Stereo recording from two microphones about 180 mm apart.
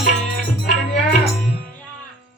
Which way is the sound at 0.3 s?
50° left (ahead or behind).